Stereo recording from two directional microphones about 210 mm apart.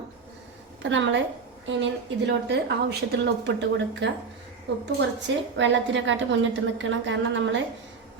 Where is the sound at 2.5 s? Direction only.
50° right (ahead or behind).